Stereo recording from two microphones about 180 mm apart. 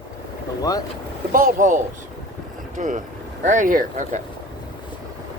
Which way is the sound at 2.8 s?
45° right (ahead or behind).